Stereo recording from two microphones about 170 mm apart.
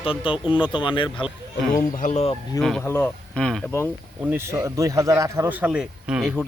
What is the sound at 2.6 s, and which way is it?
Speech, 5° left (ahead or behind).